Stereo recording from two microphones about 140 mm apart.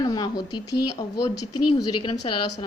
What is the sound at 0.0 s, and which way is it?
Speech, 30° left (ahead or behind).